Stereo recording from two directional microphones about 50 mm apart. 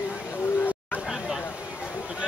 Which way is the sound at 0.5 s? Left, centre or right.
Left.